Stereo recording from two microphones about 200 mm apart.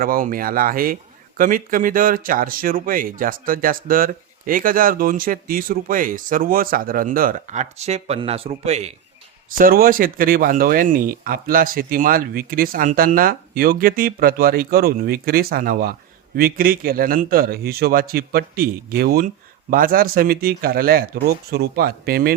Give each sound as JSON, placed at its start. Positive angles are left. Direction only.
{"t": 0.0, "sound": "speech", "side_deg": -45}
{"t": 9.5, "sound": "speech", "side_deg": -45}